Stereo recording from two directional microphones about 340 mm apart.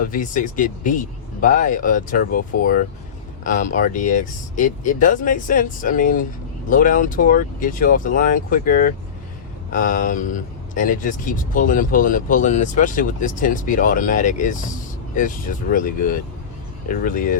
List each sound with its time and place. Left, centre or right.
0.0 s speech: left